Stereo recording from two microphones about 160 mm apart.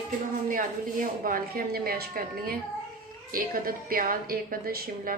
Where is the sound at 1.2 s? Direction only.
60° right (ahead or behind).